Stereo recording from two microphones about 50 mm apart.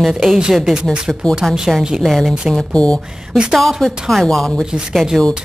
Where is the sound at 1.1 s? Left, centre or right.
Centre.